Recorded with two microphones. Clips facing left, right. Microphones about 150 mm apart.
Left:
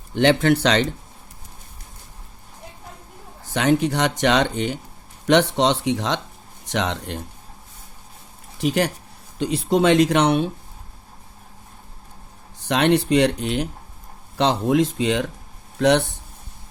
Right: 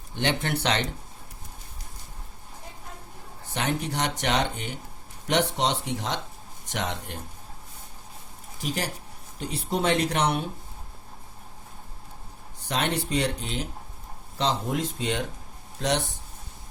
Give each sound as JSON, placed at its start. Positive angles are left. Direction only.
{"t": 0.2, "sound": "speech", "side_deg": 90}
{"t": 3.5, "sound": "speech", "side_deg": 90}
{"t": 8.6, "sound": "speech", "side_deg": 75}
{"t": 9.4, "sound": "speech", "side_deg": 90}
{"t": 12.6, "sound": "speech", "side_deg": 75}
{"t": 15.8, "sound": "speech", "side_deg": 65}